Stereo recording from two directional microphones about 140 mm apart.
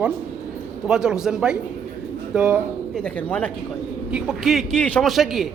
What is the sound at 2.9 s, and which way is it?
Speech, 10° left (ahead or behind).